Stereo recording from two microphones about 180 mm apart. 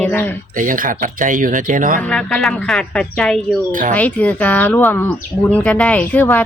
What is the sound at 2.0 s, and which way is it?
A woman's voice, 5° left (ahead or behind).